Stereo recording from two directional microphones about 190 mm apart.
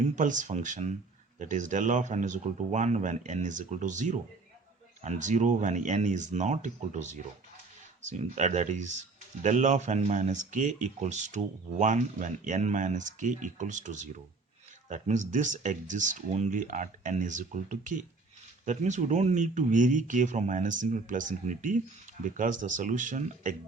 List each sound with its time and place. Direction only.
0.2 s speech: 40° right (ahead or behind)